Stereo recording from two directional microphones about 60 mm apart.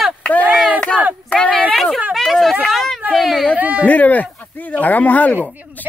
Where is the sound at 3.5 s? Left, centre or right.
Right.